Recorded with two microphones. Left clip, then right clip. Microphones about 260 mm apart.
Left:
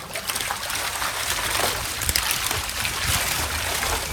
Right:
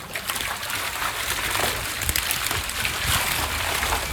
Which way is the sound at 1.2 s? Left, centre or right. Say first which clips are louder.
Left 1 dB; centre.